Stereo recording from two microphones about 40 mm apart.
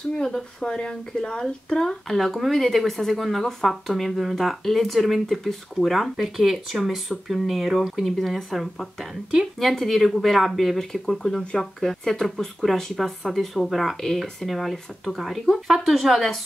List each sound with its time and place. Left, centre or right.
0.2 s speech: centre
2.0 s speech: centre